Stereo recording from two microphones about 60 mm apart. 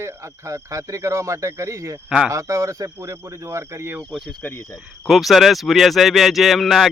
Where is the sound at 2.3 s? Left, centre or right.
Right.